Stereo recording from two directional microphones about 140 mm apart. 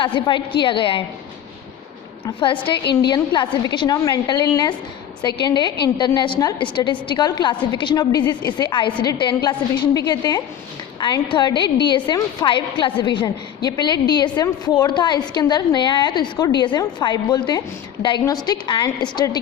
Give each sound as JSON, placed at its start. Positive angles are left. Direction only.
{"t": 0.0, "sound": "a woman's voice", "side_deg": 35}
{"t": 2.2, "sound": "a woman's voice", "side_deg": 35}